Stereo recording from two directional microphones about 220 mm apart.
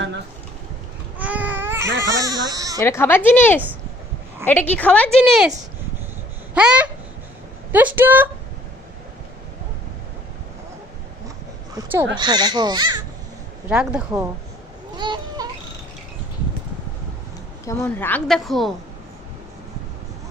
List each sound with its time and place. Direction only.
1.2 s babbling: 5° right (ahead or behind)
2.0 s speech: 15° right (ahead or behind)
2.8 s a woman's voice: 10° left (ahead or behind)
6.5 s babbling: 5° right (ahead or behind)
7.7 s a woman's voice: 10° right (ahead or behind)
11.8 s speech: 10° right (ahead or behind)
13.7 s a woman's voice: 5° right (ahead or behind)
14.9 s a sound: 20° right (ahead or behind)
17.7 s a woman's voice: 10° left (ahead or behind)